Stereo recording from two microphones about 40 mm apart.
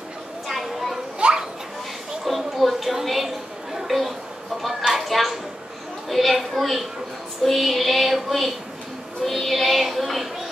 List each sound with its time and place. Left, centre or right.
0.5 s children playing: centre
1.2 s children playing: right
2.2 s a sound: centre
9.2 s child singing: centre